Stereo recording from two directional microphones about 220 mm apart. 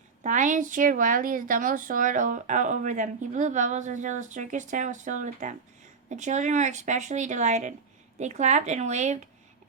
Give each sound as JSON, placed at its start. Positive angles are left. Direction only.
{"t": 0.2, "sound": "a woman's voice", "side_deg": -35}